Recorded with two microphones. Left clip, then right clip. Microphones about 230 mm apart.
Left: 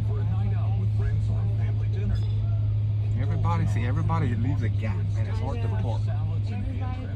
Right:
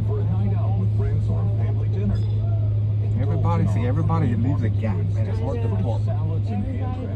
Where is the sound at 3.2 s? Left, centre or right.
Centre.